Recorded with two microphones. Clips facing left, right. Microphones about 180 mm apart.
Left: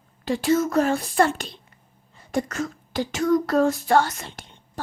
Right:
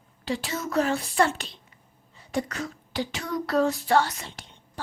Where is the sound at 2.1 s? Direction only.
50° left (ahead or behind).